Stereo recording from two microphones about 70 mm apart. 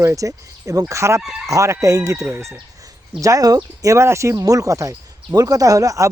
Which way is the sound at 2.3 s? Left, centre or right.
Right.